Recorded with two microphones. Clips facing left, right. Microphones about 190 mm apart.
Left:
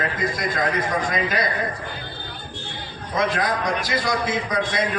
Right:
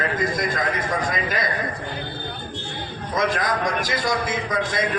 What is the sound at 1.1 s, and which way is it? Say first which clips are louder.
Speech: left 2 dB; 45° right (ahead or behind).